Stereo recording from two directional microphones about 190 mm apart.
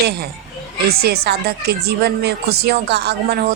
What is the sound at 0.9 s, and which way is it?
A woman's voice, 55° right (ahead or behind).